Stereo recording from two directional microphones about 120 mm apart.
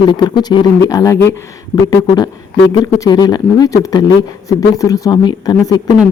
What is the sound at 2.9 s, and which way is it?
A man's voice, 30° left (ahead or behind).